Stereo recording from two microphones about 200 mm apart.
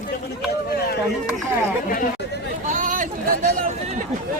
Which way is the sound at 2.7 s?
40° right (ahead or behind).